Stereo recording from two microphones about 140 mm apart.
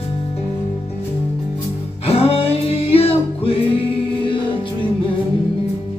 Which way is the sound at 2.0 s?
45° left (ahead or behind).